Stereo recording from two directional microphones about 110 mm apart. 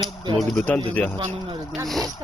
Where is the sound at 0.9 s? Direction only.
15° left (ahead or behind).